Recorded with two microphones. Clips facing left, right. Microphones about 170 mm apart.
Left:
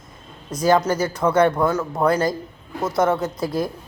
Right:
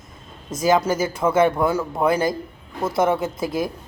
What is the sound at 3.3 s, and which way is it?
Speech, 20° right (ahead or behind).